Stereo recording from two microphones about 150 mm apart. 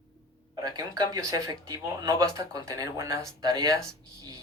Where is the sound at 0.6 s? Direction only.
25° right (ahead or behind).